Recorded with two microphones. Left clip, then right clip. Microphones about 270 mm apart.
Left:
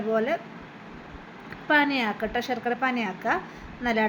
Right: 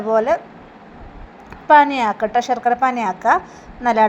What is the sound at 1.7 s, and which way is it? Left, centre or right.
A woman's voice, centre.